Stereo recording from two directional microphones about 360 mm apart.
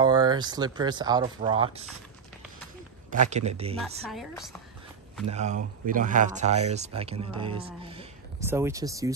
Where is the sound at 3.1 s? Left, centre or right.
Centre.